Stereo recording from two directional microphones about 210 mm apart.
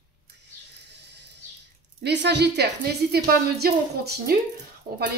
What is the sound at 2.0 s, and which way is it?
Speech, 55° right (ahead or behind).